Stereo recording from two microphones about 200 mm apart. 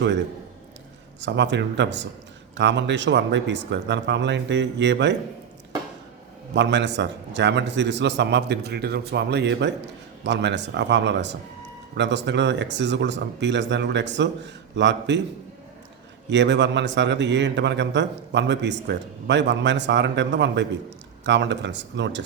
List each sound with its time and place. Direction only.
1.2 s a man's voice: 60° right (ahead or behind)
6.5 s a man's voice: 60° right (ahead or behind)
16.3 s a man's voice: 60° right (ahead or behind)